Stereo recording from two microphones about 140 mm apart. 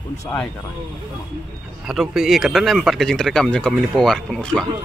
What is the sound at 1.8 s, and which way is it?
Speech, centre (ahead or behind).